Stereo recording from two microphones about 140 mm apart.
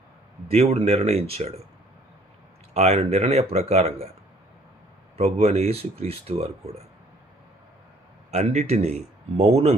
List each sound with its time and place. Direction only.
0.5 s speech: 50° right (ahead or behind)
2.7 s speech: 50° right (ahead or behind)
5.1 s speech: 50° right (ahead or behind)
8.3 s speech: 50° right (ahead or behind)